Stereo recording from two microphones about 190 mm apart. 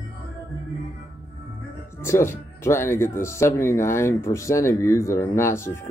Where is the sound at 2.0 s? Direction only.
15° left (ahead or behind).